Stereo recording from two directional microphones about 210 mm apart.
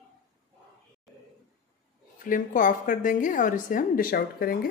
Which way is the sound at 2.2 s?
40° left (ahead or behind).